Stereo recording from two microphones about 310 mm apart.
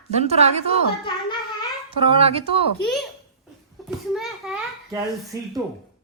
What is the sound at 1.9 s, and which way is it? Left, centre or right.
Speech, centre.